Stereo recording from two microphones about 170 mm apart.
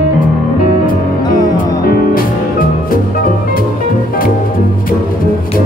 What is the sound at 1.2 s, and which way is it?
Music, 25° left (ahead or behind).